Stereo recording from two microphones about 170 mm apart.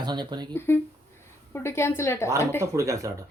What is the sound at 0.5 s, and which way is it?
Speech, 15° left (ahead or behind).